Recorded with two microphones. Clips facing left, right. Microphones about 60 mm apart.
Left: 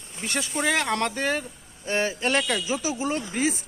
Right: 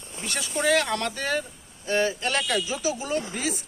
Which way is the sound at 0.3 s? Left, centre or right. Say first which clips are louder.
Right 2 dB; left.